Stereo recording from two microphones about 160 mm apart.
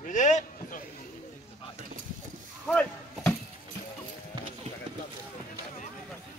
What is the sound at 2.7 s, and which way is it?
Chop, 10° left (ahead or behind).